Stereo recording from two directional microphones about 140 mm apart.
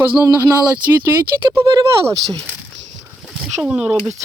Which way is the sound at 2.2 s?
5° left (ahead or behind).